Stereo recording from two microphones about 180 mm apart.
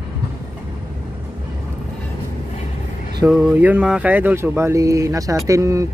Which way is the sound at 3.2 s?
10° right (ahead or behind).